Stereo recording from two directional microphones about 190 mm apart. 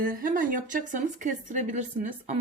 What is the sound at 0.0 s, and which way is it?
Speech, 45° right (ahead or behind).